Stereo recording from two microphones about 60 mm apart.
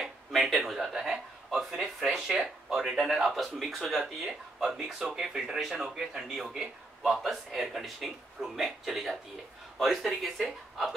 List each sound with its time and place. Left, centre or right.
0.3 s speech: centre